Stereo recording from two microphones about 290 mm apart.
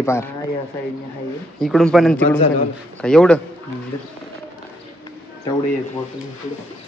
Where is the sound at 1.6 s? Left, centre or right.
Centre.